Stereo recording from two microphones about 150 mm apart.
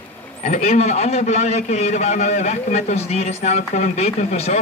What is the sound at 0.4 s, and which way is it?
A man's voice, 45° left (ahead or behind).